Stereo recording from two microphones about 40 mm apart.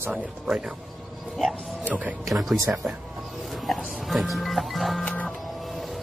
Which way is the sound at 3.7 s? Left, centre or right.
Centre.